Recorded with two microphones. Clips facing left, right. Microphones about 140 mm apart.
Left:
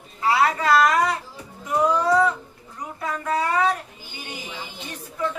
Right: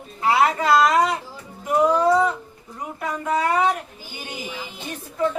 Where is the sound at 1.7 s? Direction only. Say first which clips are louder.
Right 2 dB; 15° right (ahead or behind).